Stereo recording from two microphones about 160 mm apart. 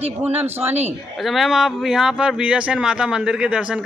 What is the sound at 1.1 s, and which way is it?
Speech, centre (ahead or behind).